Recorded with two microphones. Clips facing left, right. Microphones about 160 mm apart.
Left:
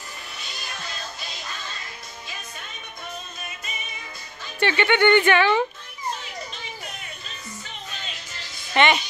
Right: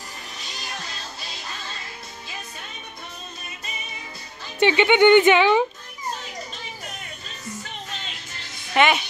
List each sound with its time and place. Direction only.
4.6 s speech: 15° right (ahead or behind)
8.7 s a woman's voice: 5° right (ahead or behind)